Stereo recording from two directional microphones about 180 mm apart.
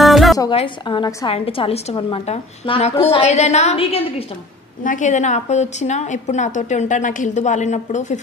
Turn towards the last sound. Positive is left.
turn(degrees=40)  # may be behind; listen again after turning